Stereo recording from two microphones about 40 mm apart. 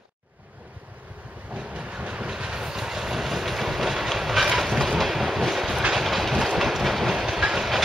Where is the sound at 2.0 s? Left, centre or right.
Right.